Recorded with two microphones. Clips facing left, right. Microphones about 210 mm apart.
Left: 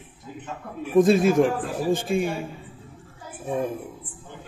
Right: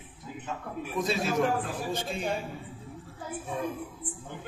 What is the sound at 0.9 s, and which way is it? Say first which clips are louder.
A man's voice: left 12 dB; 50° left (ahead or behind).